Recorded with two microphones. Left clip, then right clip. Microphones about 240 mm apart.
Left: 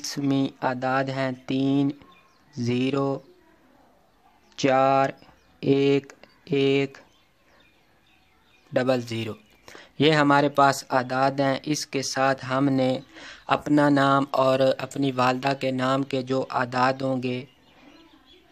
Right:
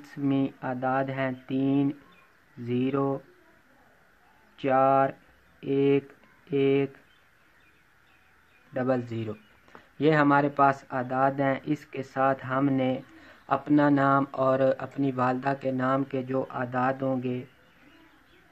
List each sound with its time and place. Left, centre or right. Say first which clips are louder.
0.0 s speech: left 3 dB; left
4.6 s speech: left 2 dB; left
8.7 s speech: left 5 dB; left